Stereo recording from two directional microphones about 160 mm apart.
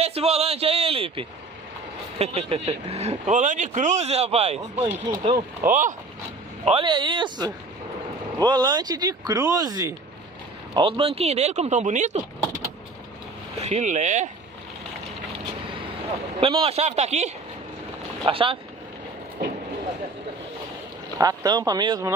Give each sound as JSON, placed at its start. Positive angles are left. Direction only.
{"t": 0.0, "sound": "a man's voice", "side_deg": -40}
{"t": 5.6, "sound": "speech", "side_deg": -55}
{"t": 6.6, "sound": "speech", "side_deg": -35}
{"t": 10.7, "sound": "speech", "side_deg": -35}
{"t": 13.6, "sound": "speech", "side_deg": -45}
{"t": 16.3, "sound": "speech", "side_deg": -35}
{"t": 18.3, "sound": "speech", "side_deg": -35}
{"t": 21.2, "sound": "speech", "side_deg": -20}